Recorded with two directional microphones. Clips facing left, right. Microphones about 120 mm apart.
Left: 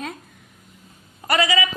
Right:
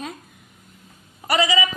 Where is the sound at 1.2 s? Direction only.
15° right (ahead or behind).